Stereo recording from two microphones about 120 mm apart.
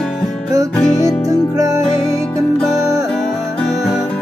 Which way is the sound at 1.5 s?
25° right (ahead or behind).